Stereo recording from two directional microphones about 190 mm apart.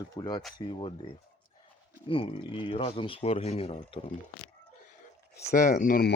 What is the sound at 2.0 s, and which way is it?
Speech, 30° left (ahead or behind).